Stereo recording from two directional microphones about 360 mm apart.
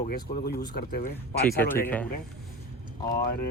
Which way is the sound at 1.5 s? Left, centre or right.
Centre.